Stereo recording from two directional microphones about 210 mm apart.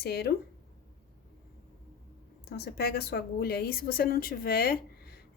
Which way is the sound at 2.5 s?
50° left (ahead or behind).